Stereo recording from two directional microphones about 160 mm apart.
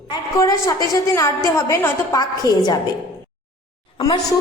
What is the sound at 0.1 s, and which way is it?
A woman's voice, 20° left (ahead or behind).